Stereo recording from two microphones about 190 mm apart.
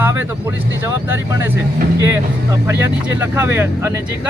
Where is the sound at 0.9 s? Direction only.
10° right (ahead or behind).